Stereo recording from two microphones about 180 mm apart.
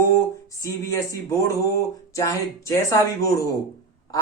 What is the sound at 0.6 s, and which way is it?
A man's voice, 15° left (ahead or behind).